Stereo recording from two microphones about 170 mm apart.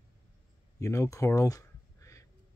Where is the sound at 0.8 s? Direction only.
15° left (ahead or behind).